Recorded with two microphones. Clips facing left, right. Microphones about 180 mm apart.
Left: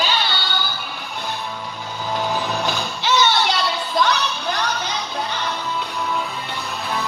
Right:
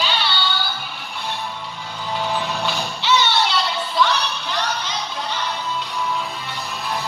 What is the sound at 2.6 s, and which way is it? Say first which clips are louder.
Music: even; 45° left (ahead or behind).